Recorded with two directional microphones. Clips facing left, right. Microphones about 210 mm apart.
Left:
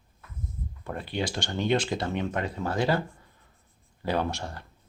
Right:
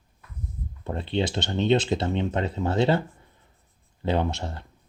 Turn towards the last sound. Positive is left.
turn(degrees=-20)  # may be behind; listen again after turning